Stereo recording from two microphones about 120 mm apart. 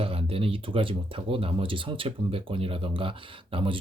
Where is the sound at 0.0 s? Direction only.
55° right (ahead or behind).